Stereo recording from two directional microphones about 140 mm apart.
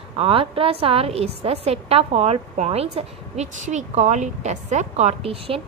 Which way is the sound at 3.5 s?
60° right (ahead or behind).